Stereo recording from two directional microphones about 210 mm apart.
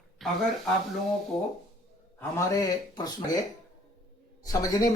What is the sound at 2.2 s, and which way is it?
Speech, 15° left (ahead or behind).